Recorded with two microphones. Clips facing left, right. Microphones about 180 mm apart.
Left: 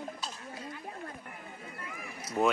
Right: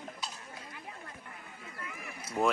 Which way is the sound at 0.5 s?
45° left (ahead or behind).